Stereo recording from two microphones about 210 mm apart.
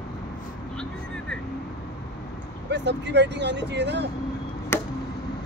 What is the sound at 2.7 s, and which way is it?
Speech, 55° right (ahead or behind).